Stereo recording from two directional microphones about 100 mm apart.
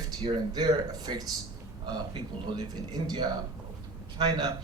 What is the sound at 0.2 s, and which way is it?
A man's voice, 45° right (ahead or behind).